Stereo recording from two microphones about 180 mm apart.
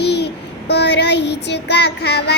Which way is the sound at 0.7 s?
70° left (ahead or behind).